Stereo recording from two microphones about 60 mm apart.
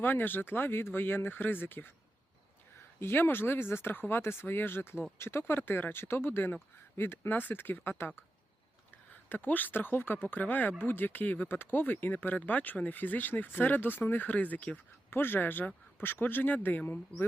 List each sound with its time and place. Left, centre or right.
0.0 s speech: left
3.0 s speech: left
9.3 s speech: left
15.1 s speech: left